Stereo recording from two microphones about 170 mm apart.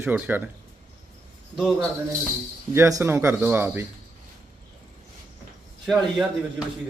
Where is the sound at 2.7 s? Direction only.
15° right (ahead or behind).